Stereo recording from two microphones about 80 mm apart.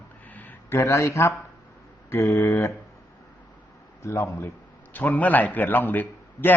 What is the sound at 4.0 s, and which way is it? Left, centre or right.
Speech, left.